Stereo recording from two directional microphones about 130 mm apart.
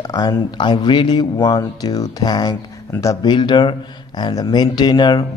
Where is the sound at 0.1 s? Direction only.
35° left (ahead or behind).